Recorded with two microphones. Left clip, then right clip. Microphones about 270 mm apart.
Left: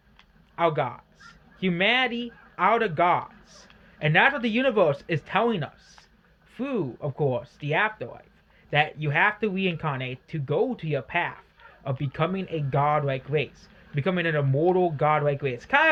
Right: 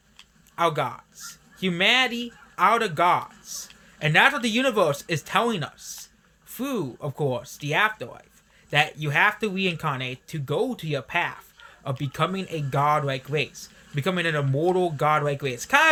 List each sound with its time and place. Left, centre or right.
0.5 s speech: centre